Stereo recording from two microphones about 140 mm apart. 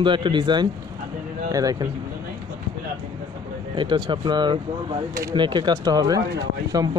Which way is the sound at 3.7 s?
35° right (ahead or behind).